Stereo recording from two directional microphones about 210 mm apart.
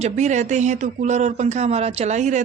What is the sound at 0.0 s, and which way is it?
Speech, 35° right (ahead or behind).